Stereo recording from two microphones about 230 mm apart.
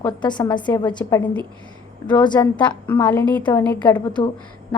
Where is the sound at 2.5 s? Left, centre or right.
Centre.